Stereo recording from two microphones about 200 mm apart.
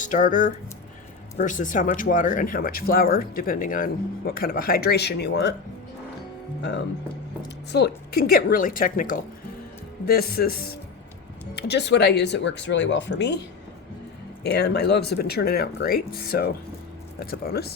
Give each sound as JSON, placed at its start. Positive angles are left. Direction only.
{"t": 0.0, "sound": "speech", "side_deg": 40}
{"t": 7.7, "sound": "speech", "side_deg": 55}
{"t": 14.4, "sound": "speech", "side_deg": 55}